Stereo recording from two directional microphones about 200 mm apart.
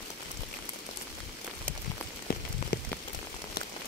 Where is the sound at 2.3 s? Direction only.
45° left (ahead or behind).